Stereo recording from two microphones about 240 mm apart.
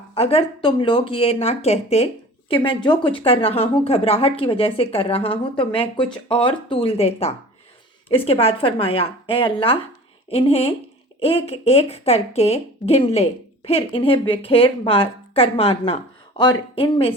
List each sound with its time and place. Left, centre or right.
0.1 s speech: left